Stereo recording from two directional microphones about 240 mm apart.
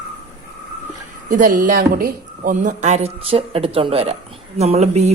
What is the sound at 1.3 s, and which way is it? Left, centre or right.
Speech, right.